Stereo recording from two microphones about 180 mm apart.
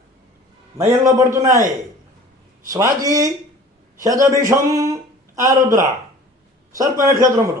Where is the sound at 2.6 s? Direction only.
20° right (ahead or behind).